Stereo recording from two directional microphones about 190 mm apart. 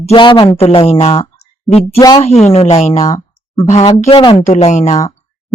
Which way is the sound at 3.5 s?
30° left (ahead or behind).